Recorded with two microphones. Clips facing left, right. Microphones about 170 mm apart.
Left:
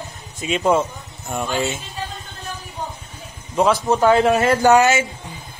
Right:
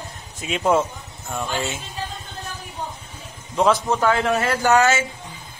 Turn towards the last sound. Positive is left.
turn(degrees=15)  # may be behind; listen again after turning